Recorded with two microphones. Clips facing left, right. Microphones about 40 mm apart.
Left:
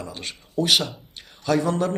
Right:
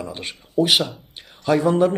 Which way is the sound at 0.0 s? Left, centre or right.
Centre.